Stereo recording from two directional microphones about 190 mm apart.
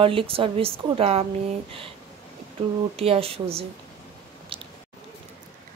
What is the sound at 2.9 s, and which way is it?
Speech, 30° right (ahead or behind).